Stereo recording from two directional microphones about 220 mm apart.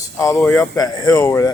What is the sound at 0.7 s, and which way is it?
Speech, 15° left (ahead or behind).